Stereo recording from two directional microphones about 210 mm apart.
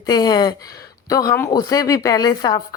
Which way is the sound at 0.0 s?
20° left (ahead or behind).